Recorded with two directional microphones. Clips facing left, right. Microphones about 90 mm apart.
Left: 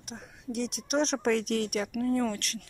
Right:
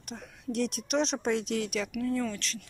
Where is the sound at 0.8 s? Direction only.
45° left (ahead or behind).